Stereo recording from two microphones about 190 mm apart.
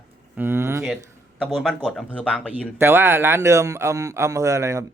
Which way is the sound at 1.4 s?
5° left (ahead or behind).